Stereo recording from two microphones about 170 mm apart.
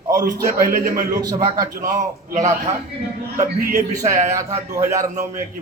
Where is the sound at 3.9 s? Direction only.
20° right (ahead or behind).